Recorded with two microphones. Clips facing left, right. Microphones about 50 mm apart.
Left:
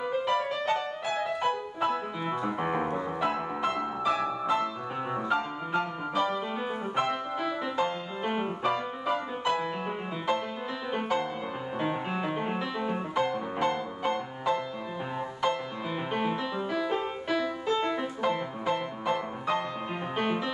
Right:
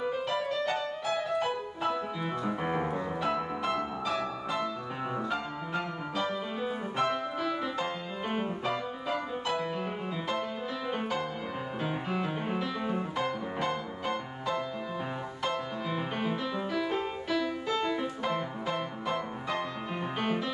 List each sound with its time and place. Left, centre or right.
0.0 s music: centre
0.5 s music: centre
1.4 s music: centre
2.2 s piano: centre
4.1 s music: centre
5.1 s piano: centre
7.0 s music: centre
7.7 s music: centre
10.9 s music: centre
11.8 s music: centre
18.2 s music: centre